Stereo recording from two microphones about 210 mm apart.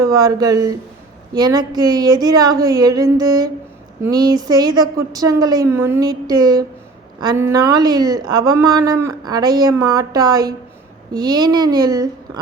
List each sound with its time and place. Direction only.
0.0 s a woman's voice: 15° right (ahead or behind)